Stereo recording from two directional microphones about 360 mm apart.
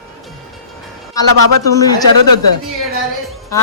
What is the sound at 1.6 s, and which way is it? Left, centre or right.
Speech, centre.